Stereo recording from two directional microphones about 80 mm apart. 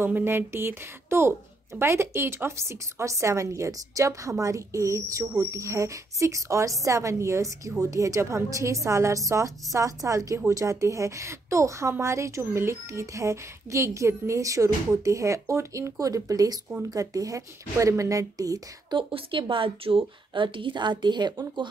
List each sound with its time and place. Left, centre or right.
0.0 s a woman's voice: right
18.9 s a woman's voice: right